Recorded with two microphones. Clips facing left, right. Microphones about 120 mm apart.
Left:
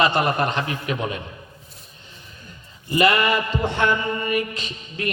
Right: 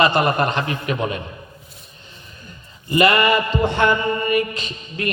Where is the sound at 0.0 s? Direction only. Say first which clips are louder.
Right 3 dB; 60° right (ahead or behind).